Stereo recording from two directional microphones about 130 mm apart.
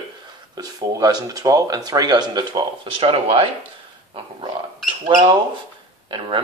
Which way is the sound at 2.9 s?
45° right (ahead or behind).